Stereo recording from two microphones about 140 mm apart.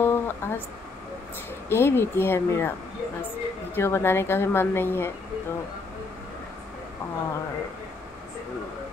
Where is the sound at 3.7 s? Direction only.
15° left (ahead or behind).